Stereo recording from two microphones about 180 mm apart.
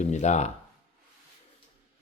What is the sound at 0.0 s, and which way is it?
Speech, 40° left (ahead or behind).